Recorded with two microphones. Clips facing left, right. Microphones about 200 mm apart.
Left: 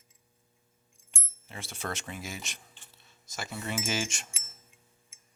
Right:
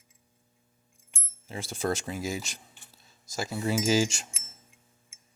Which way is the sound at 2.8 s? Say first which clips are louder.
Right 1 dB; 40° right (ahead or behind).